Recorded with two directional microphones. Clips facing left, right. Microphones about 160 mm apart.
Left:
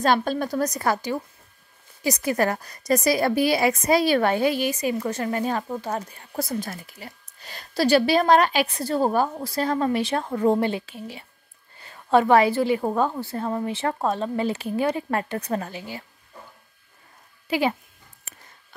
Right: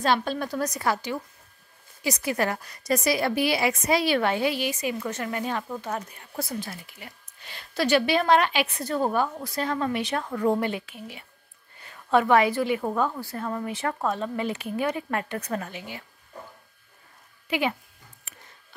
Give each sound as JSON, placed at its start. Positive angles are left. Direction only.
{"t": 0.0, "sound": "a woman's voice", "side_deg": 45}
{"t": 17.5, "sound": "speech", "side_deg": 35}
{"t": 18.3, "sound": "a sound", "side_deg": 40}